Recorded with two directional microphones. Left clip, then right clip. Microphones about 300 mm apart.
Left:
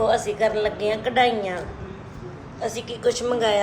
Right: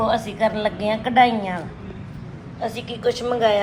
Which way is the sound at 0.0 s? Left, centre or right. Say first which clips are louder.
Even; centre.